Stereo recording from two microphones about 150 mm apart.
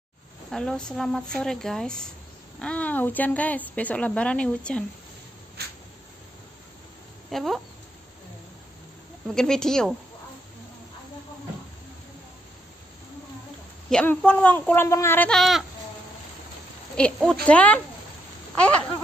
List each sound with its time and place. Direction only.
0.5 s a woman's voice: 5° left (ahead or behind)
5.6 s a sound: 90° right
7.2 s speech: centre (ahead or behind)
9.3 s a woman's voice: 5° left (ahead or behind)
13.8 s a woman's voice: 5° left (ahead or behind)
16.9 s a woman's voice: 5° left (ahead or behind)
18.5 s a sound: 10° left (ahead or behind)